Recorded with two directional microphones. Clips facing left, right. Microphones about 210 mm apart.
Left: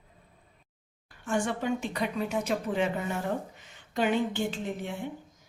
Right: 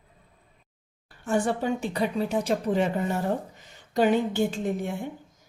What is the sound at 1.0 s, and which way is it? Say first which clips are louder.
Speech: right 4 dB; 35° right (ahead or behind).